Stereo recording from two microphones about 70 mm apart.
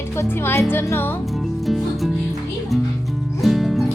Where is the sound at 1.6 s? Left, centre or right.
Centre.